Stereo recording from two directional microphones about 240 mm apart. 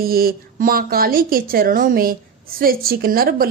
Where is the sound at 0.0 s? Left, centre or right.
Right.